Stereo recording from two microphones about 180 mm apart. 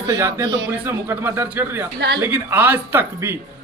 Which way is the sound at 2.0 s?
65° right (ahead or behind).